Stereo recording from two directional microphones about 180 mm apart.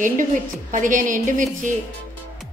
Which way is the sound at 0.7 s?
45° right (ahead or behind).